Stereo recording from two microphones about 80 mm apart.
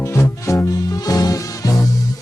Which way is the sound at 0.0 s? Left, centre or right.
Left.